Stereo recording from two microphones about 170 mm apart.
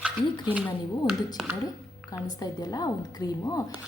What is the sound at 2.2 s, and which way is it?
A woman's voice, 25° left (ahead or behind).